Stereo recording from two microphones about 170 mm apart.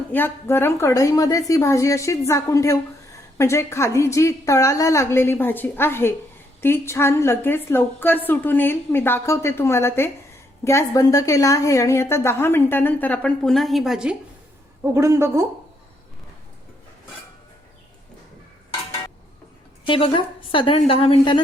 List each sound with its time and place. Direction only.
0.1 s a woman's voice: 15° left (ahead or behind); by 14.2 s 5° right (ahead or behind)
14.9 s a woman's voice: 15° right (ahead or behind)
19.9 s a woman's voice: 30° left (ahead or behind)